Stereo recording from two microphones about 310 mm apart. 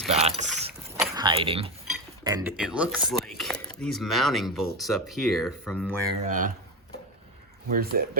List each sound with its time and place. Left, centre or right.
0.1 s boat: centre
0.7 s vehicle: centre
1.9 s speech: centre
6.2 s speech: right
7.7 s speech: right